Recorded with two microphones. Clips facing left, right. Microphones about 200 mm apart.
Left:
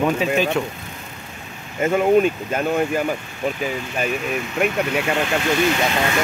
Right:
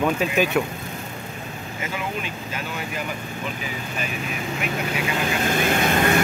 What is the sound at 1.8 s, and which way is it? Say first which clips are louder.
Speech: left 15 dB; 50° left (ahead or behind).